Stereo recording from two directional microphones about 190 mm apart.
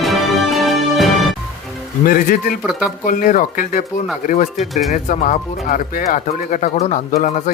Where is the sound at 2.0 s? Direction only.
45° left (ahead or behind).